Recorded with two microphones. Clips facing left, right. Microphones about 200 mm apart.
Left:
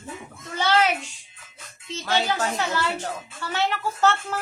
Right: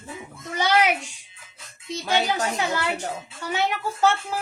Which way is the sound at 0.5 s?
15° right (ahead or behind).